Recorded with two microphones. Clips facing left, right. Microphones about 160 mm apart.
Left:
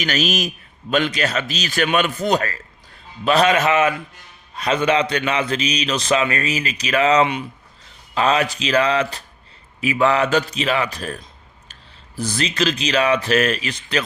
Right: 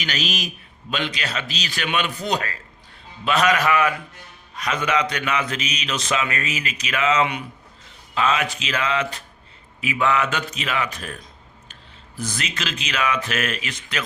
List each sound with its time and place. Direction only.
0.0 s a man's voice: 45° left (ahead or behind)
3.2 s a man's voice: 30° left (ahead or behind)